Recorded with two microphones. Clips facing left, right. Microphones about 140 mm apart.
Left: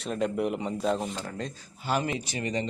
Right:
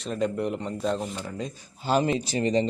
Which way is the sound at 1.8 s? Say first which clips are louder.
Right 5 dB; 25° right (ahead or behind).